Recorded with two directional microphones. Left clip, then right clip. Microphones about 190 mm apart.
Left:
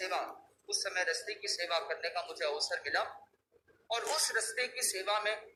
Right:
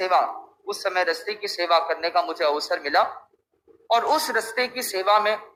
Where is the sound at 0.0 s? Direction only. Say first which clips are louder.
Right 16 dB; 50° right (ahead or behind).